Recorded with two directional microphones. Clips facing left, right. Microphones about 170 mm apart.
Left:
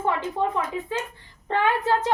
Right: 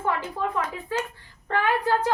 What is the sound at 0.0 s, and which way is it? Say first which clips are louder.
A woman's voice: left 3 dB; 20° left (ahead or behind).